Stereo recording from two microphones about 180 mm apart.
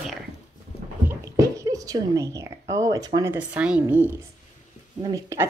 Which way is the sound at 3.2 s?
10° right (ahead or behind).